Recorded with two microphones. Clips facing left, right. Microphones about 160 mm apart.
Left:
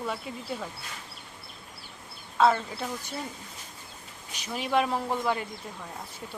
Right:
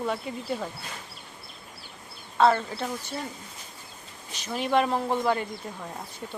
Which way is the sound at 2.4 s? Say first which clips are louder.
Right 2 dB; 5° left (ahead or behind).